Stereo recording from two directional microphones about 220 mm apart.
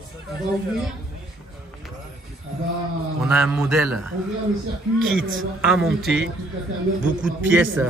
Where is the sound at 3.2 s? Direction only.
5° right (ahead or behind).